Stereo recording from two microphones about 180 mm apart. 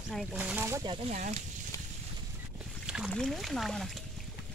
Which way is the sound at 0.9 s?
40° right (ahead or behind).